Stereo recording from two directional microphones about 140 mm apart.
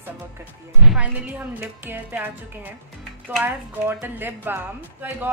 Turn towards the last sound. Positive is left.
turn(degrees=-15)  # may be behind; listen again after turning